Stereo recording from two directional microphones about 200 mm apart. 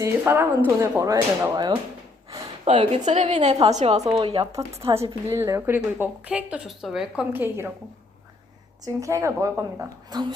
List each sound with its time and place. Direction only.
0.0 s a woman's voice: 10° right (ahead or behind)
4.9 s a woman's voice: 15° right (ahead or behind)
8.8 s a woman's voice: 15° right (ahead or behind)